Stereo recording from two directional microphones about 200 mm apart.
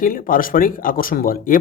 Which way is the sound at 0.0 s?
45° left (ahead or behind).